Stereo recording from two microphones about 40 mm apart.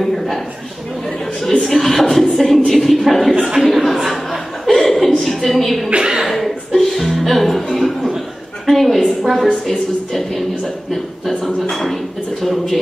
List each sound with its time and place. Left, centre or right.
0.0 s a sound: centre
1.6 s a woman's voice: centre
3.3 s chuckle: centre
5.9 s a woman's voice: right
6.2 s music: centre
8.6 s a sound: centre
11.7 s dishes: centre